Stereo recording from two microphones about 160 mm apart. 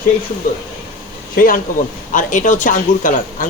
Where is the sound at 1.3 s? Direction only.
60° left (ahead or behind).